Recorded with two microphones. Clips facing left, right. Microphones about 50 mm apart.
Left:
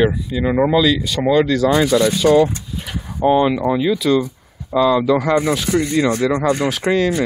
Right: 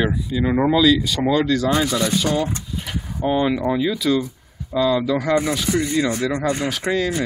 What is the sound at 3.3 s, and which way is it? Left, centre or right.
Speech, left.